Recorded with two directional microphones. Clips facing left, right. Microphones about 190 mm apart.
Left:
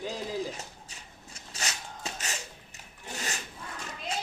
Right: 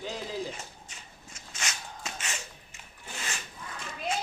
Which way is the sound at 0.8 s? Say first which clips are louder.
Even; 35° left (ahead or behind).